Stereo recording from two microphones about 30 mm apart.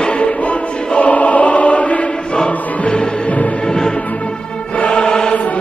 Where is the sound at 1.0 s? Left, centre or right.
Left.